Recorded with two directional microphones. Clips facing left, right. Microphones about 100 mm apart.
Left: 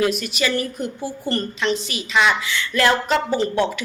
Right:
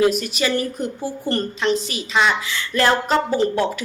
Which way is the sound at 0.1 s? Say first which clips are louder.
Right 1 dB; 35° right (ahead or behind).